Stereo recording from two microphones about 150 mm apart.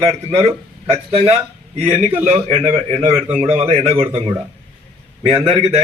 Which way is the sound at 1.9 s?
45° right (ahead or behind).